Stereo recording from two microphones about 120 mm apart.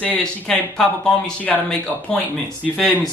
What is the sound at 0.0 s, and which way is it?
Speech, 10° left (ahead or behind).